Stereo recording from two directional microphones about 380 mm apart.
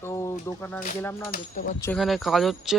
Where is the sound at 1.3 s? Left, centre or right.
Left.